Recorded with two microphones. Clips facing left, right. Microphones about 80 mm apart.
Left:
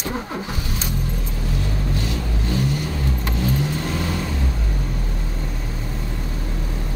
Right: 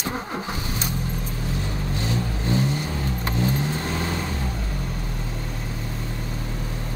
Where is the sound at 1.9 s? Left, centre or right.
Right.